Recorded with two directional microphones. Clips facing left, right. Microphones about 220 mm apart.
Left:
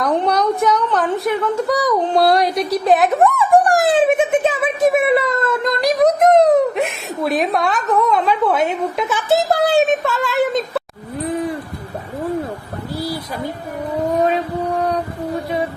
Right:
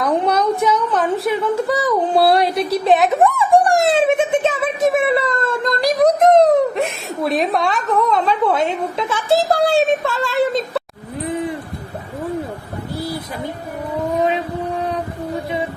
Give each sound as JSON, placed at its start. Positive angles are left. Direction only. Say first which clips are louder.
{"t": 0.0, "sound": "speech", "louder": "even", "side_deg": 0}
{"t": 4.0, "sound": "a sound", "louder": "left 1 dB", "side_deg": 5}
{"t": 4.9, "sound": "speech", "louder": "left 1 dB", "side_deg": 0}
{"t": 9.7, "sound": "speech", "louder": "left 1 dB", "side_deg": -25}